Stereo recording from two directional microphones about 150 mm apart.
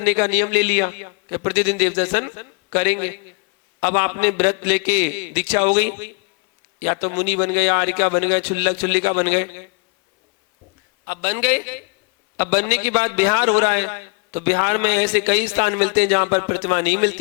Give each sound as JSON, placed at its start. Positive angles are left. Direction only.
{"t": 0.0, "sound": "a man's voice", "side_deg": -20}
{"t": 11.1, "sound": "a man's voice", "side_deg": -20}